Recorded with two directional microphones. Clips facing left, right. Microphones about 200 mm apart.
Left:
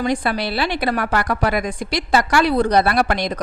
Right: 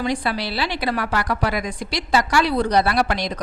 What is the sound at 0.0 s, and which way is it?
A woman's voice, 50° left (ahead or behind).